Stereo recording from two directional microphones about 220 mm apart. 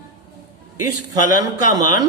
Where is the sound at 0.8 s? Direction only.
15° right (ahead or behind).